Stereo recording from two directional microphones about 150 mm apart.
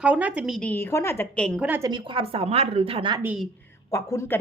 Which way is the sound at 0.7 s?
15° left (ahead or behind).